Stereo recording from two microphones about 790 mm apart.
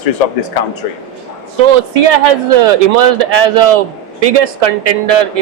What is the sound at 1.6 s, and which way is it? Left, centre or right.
A man's voice, right.